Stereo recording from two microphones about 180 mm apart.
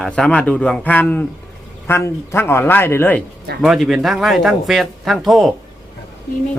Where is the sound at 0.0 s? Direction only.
5° left (ahead or behind).